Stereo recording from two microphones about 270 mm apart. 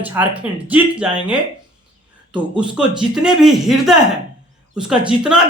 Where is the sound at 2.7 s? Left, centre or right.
Centre.